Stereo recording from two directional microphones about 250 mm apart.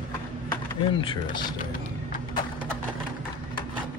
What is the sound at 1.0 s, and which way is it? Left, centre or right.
Speech, centre.